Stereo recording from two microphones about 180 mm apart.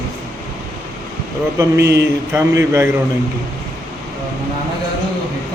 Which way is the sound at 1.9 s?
15° right (ahead or behind).